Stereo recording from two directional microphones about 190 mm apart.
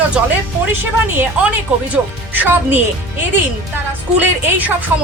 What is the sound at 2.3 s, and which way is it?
A woman's voice, 10° right (ahead or behind).